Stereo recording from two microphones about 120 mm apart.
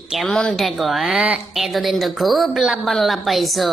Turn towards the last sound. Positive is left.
turn(degrees=0)  # may be behind; listen again after turning